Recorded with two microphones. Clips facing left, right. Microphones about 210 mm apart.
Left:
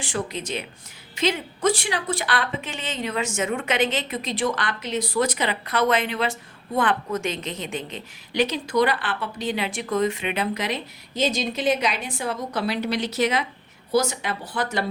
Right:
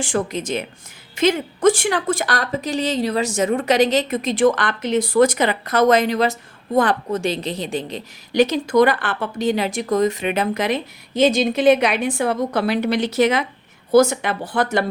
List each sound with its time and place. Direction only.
0.0 s a woman's voice: 45° right (ahead or behind)